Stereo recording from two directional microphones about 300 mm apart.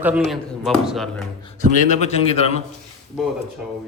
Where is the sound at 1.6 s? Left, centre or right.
Left.